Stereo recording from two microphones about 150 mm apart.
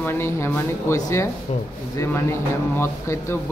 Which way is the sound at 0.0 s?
15° left (ahead or behind).